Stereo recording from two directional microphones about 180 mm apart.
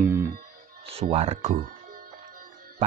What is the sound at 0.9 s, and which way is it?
Speech, 35° right (ahead or behind).